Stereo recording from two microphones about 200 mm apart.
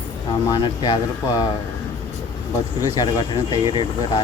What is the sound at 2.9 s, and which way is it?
Speech, 20° left (ahead or behind).